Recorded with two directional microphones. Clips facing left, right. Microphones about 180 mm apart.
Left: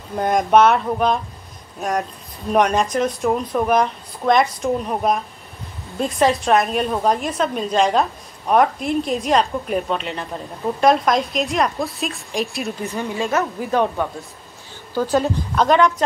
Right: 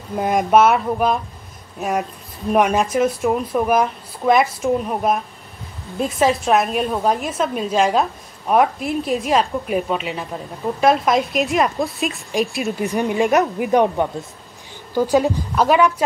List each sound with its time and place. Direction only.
0.1 s a woman's voice: 5° right (ahead or behind)
12.8 s a woman's voice: 15° right (ahead or behind)